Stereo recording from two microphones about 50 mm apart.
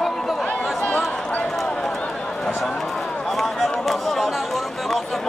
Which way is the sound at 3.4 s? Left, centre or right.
Centre.